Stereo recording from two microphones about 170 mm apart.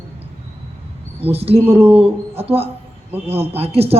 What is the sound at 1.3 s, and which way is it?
A man's voice, 35° right (ahead or behind).